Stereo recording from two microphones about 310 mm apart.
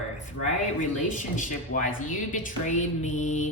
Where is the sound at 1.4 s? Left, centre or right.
Left.